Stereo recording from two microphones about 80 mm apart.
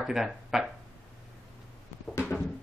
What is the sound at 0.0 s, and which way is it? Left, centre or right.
Speech, centre.